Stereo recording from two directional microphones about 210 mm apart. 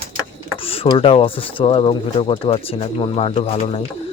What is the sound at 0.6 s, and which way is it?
Speech, 25° left (ahead or behind).